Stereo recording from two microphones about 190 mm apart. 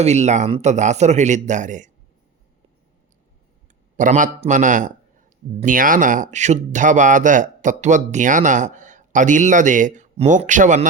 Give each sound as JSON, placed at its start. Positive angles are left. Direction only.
{"t": 0.0, "sound": "speech", "side_deg": -35}
{"t": 3.9, "sound": "speech", "side_deg": -40}